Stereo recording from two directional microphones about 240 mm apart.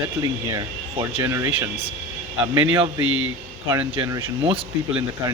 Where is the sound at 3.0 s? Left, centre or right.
Right.